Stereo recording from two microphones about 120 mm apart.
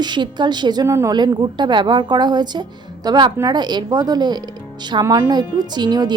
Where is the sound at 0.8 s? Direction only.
25° right (ahead or behind).